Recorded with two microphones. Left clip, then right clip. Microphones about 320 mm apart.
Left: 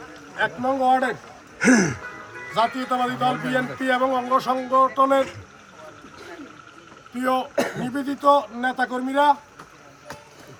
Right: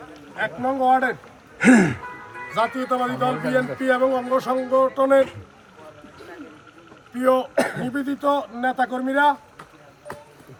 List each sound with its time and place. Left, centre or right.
0.3 s speech: centre
1.6 s speech: right
2.6 s speech: centre
7.2 s speech: centre
7.5 s speech: right
7.9 s speech: centre